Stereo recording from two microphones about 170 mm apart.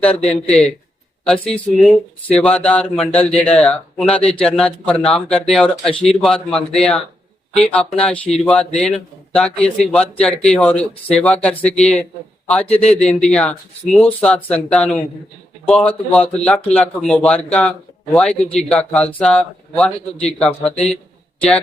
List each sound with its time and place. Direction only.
0.0 s speech: 5° left (ahead or behind)
12.7 s a man's voice: 40° left (ahead or behind)
13.0 s speech: 5° left (ahead or behind)